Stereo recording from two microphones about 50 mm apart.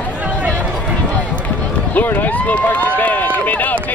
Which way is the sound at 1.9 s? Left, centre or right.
Left.